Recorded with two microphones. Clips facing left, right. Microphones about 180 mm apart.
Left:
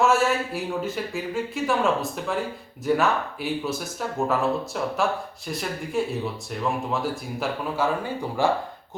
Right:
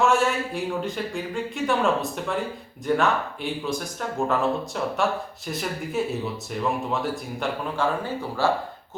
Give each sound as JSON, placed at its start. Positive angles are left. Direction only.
{"t": 0.0, "sound": "speech", "side_deg": 0}
{"t": 4.3, "sound": "speech", "side_deg": 0}
{"t": 8.4, "sound": "speech", "side_deg": 15}